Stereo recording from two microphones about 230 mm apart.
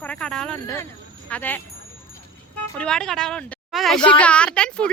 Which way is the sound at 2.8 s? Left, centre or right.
Centre.